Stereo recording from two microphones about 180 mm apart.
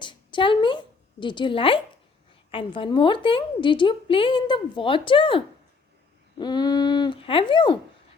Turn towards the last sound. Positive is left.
turn(degrees=25)  # may be behind; listen again after turning